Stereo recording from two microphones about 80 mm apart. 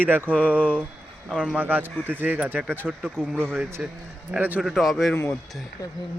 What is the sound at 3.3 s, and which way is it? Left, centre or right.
Speech, right.